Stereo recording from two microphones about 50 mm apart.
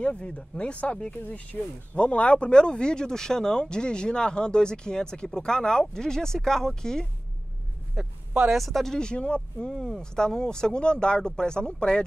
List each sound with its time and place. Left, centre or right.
0.0 s speech: left
1.1 s speech: left; by 7.1 s centre
8.5 s speech: centre
9.7 s speech: centre